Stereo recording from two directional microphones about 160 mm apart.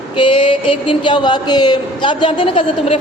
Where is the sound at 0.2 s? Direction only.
30° left (ahead or behind).